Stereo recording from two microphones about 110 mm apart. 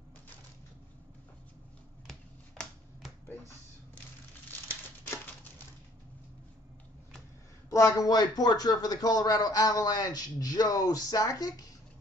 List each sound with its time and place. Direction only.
2.0 s finger snapping: 5° left (ahead or behind)
7.7 s speech: 30° left (ahead or behind)